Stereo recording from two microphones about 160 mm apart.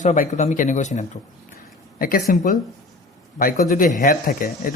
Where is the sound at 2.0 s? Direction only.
65° left (ahead or behind).